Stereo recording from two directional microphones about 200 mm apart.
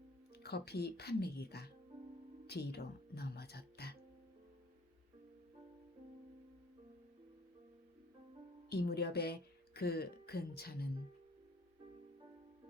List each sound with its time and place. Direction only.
0.3 s speech: 55° left (ahead or behind)
8.7 s a woman's voice: 55° left (ahead or behind)